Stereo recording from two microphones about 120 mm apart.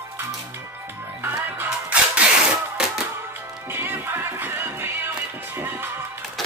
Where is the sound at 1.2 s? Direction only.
20° right (ahead or behind).